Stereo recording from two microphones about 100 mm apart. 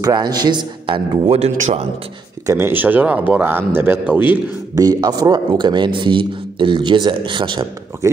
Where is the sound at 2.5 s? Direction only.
25° right (ahead or behind).